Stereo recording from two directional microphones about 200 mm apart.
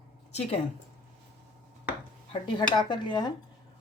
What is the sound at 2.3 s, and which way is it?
Dishes, 25° left (ahead or behind).